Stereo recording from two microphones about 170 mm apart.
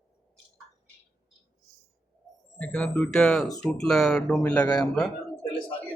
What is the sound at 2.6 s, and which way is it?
A man's voice, 5° left (ahead or behind).